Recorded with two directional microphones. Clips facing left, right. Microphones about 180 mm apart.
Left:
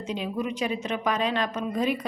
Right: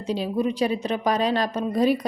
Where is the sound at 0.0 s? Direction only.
35° right (ahead or behind).